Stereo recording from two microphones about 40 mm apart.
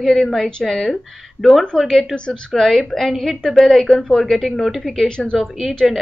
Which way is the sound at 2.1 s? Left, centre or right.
Left.